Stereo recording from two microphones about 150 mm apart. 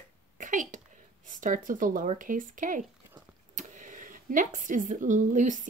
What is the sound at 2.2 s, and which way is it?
Speech, 65° right (ahead or behind).